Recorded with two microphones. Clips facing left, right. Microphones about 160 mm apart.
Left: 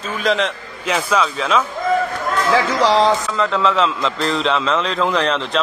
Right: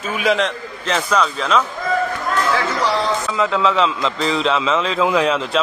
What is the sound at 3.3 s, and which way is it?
A man's voice, centre (ahead or behind).